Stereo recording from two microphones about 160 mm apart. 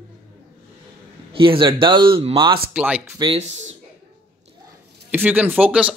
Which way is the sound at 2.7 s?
10° right (ahead or behind).